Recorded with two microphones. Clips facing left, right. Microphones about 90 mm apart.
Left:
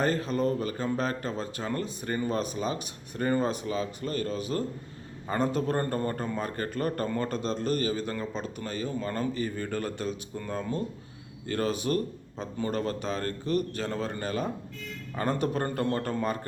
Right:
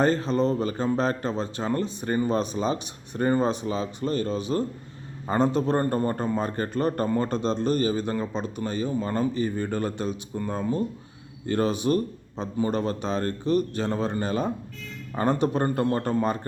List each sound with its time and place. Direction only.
0.0 s a man's voice: 30° right (ahead or behind)